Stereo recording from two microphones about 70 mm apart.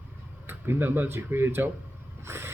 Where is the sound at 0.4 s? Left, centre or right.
Right.